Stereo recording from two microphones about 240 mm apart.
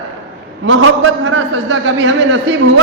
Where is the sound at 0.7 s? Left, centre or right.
Right.